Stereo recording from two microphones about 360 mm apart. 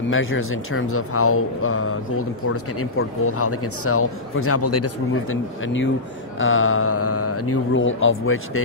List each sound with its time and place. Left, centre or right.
0.1 s speech: left